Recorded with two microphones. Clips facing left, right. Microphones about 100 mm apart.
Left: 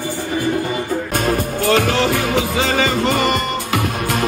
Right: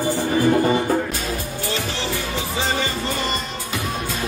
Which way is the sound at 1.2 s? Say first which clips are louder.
Left 9 dB; 60° left (ahead or behind).